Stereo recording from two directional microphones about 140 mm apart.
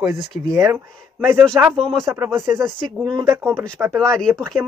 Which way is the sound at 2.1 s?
20° right (ahead or behind).